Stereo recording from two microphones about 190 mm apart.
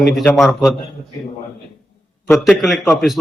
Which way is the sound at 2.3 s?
Centre (ahead or behind).